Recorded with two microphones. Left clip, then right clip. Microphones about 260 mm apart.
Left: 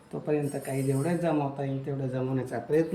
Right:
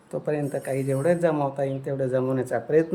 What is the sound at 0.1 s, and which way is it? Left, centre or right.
Speech, centre.